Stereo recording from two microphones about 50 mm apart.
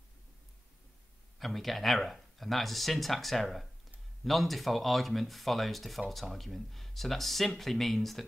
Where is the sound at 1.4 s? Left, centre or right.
Centre.